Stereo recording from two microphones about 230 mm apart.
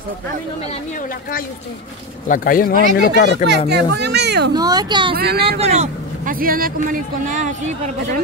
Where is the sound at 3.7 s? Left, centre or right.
Right.